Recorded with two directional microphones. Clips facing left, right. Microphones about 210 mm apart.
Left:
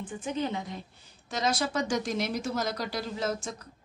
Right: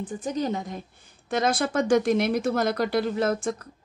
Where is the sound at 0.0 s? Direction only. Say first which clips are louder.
Right 4 dB; 40° right (ahead or behind).